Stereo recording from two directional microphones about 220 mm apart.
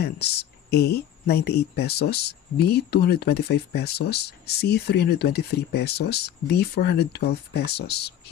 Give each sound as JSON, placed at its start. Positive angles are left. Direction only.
{"t": 0.0, "sound": "speech", "side_deg": 45}